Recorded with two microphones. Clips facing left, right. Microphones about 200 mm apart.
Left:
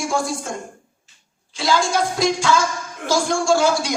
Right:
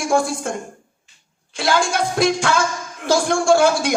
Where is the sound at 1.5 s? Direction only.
55° right (ahead or behind).